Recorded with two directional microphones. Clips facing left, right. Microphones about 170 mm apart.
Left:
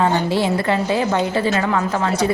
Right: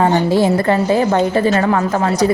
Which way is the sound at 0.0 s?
40° right (ahead or behind).